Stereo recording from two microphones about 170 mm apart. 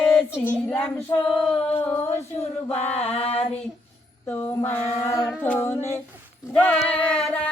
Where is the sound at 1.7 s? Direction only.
15° left (ahead or behind).